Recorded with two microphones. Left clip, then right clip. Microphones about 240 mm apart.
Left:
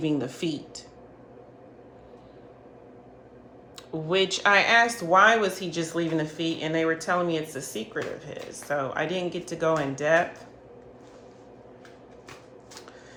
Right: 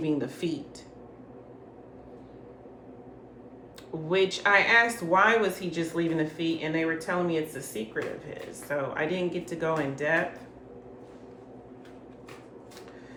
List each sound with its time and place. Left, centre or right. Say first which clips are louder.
0.0 s speech: left 2 dB; left
4.1 s speech: left 2 dB; left